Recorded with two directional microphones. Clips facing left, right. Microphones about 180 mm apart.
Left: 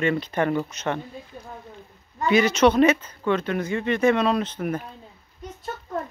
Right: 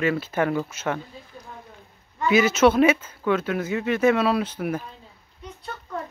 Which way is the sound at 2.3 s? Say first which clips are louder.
Even; 5° right (ahead or behind).